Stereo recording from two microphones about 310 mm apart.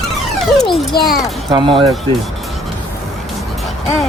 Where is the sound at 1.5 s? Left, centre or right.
Centre.